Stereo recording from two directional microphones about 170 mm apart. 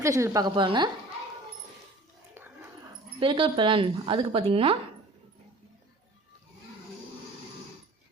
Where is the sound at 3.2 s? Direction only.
30° right (ahead or behind).